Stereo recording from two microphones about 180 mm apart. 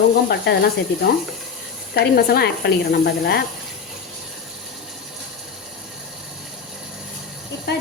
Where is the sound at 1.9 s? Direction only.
60° left (ahead or behind).